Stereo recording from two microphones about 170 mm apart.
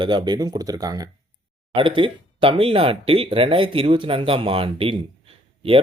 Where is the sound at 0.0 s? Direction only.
25° right (ahead or behind).